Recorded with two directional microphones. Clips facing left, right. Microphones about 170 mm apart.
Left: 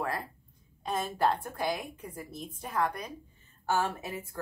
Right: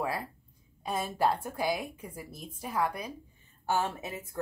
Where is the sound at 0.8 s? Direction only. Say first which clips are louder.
Even; 10° right (ahead or behind).